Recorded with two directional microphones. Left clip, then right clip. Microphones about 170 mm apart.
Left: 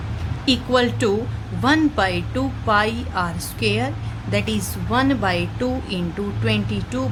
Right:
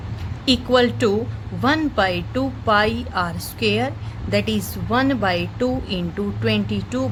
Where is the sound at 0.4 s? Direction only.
30° right (ahead or behind).